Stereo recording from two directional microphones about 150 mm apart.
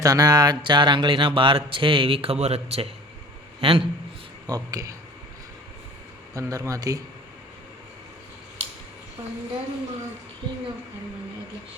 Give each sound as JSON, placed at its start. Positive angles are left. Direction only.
{"t": 0.0, "sound": "speech", "side_deg": -25}
{"t": 4.4, "sound": "speech", "side_deg": -25}
{"t": 6.3, "sound": "speech", "side_deg": -20}